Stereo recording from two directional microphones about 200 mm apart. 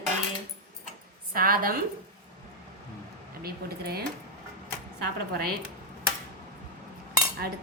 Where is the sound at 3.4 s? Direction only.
50° right (ahead or behind).